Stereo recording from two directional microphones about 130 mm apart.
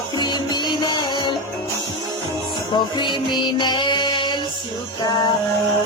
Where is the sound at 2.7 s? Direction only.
35° left (ahead or behind).